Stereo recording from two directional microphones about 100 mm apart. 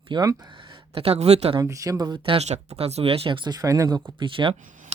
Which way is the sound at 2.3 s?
90° right.